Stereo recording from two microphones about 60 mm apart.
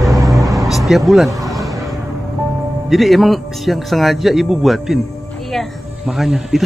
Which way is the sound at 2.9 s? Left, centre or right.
Centre.